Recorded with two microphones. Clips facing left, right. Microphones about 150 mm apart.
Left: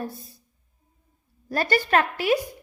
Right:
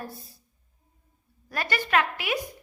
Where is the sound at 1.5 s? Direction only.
35° left (ahead or behind).